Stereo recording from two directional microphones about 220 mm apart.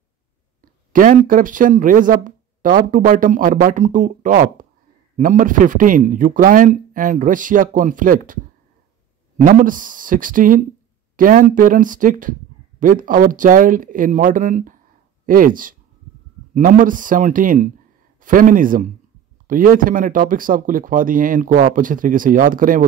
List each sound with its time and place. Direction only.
0.6 s speech: 40° right (ahead or behind)
9.4 s speech: 35° right (ahead or behind)